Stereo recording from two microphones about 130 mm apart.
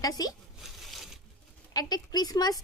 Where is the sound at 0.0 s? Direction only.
30° left (ahead or behind).